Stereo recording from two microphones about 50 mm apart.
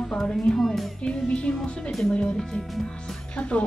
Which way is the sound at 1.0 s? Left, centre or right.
Left.